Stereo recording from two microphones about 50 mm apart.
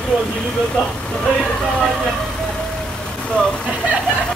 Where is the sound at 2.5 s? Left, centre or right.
Centre.